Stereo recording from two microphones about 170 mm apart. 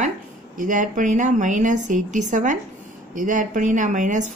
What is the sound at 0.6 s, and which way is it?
Speech, 50° right (ahead or behind).